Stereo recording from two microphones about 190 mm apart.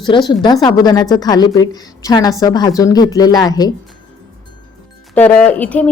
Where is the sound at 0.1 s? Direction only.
25° left (ahead or behind).